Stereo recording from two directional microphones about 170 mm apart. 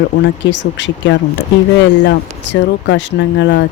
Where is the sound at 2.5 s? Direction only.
90° left.